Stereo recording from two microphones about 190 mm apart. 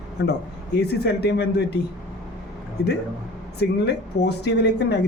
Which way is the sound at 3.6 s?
60° left (ahead or behind).